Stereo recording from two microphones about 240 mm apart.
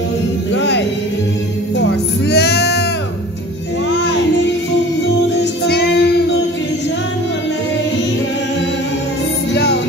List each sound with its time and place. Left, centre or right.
0.5 s music: left
5.4 s music: left
9.5 s music: left